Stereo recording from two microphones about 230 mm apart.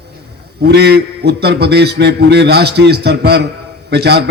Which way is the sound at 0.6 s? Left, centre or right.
Right.